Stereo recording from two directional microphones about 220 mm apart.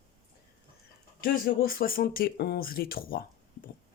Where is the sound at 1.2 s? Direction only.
40° left (ahead or behind).